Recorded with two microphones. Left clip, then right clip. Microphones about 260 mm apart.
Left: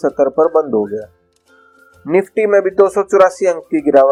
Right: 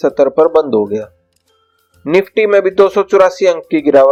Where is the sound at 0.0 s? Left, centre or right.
Right.